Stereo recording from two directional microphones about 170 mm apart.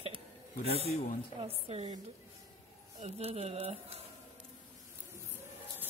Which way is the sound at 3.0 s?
35° right (ahead or behind).